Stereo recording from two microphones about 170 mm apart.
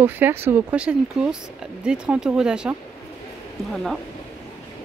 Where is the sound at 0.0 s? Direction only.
10° right (ahead or behind).